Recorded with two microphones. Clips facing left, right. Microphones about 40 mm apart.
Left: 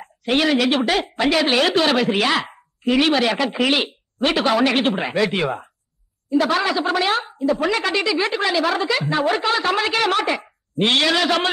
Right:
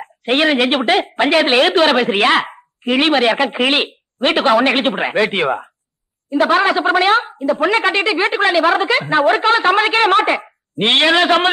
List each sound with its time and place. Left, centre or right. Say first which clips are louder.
0.0 s a woman's voice: right 4 dB; right